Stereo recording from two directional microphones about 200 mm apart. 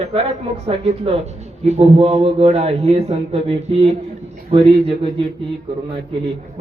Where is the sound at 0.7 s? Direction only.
30° right (ahead or behind).